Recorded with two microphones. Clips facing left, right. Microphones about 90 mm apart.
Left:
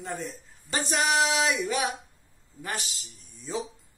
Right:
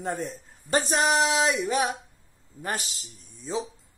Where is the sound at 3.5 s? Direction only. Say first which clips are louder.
Right 2 dB; 25° right (ahead or behind).